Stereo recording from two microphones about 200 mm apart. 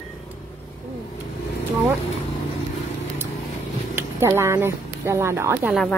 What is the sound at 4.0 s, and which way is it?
Speech, 10° right (ahead or behind).